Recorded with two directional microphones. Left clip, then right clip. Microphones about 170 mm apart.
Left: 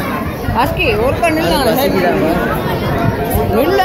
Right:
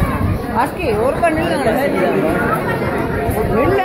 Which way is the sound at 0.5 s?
Centre (ahead or behind).